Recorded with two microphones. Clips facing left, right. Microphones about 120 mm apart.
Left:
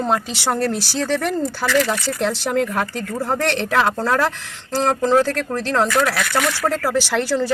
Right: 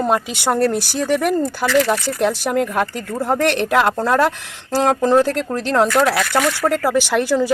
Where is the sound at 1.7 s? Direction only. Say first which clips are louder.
Right 3 dB; 30° right (ahead or behind).